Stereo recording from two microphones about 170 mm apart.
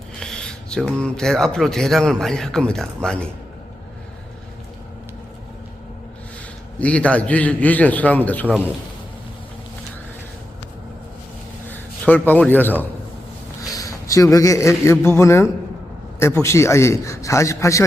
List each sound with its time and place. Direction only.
0.2 s speech: 5° left (ahead or behind)
6.7 s a man's voice: 5° left (ahead or behind)
11.7 s a man's voice: 10° left (ahead or behind)